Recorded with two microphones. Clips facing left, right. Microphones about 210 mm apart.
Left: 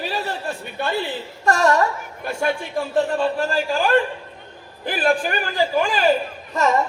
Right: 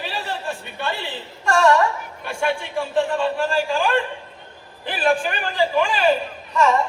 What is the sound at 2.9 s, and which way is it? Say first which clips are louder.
Speech: left 1 dB; 40° left (ahead or behind).